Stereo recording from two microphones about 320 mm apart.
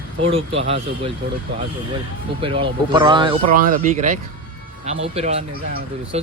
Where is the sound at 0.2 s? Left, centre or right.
Centre.